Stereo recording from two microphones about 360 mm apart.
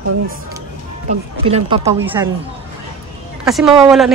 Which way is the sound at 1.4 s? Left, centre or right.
Centre.